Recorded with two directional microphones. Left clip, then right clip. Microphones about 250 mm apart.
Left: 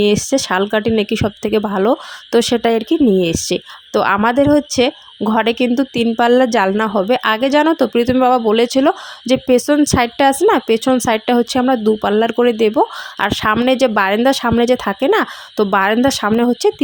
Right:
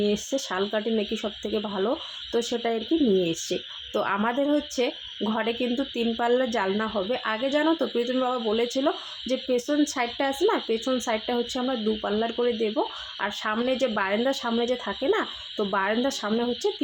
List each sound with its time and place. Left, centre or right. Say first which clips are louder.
0.0 s speech: left 12 dB; left